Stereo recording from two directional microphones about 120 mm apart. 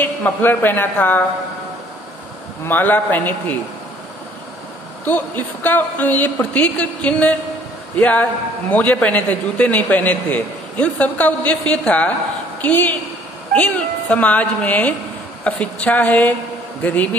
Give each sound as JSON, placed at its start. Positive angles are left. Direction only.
{"t": 0.0, "sound": "a man's voice", "side_deg": 15}
{"t": 2.6, "sound": "a man's voice", "side_deg": 15}
{"t": 5.0, "sound": "a man's voice", "side_deg": 15}